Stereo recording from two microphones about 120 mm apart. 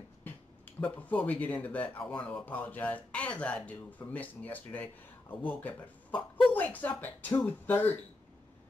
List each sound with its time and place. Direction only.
0.7 s speech: 15° left (ahead or behind)